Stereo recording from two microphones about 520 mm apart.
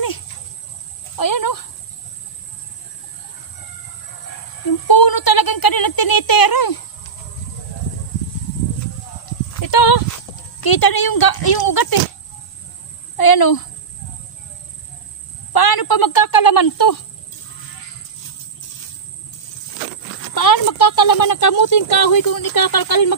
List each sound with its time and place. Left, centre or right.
1.1 s speech: left
4.8 s speech: left
9.5 s horse: left
13.1 s a woman's voice: left
15.5 s speech: left
20.3 s speech: left